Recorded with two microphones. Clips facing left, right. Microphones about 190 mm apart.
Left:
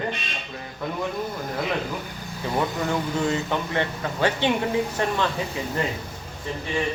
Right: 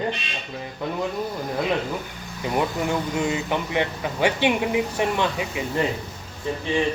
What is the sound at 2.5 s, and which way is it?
Speech, 15° right (ahead or behind).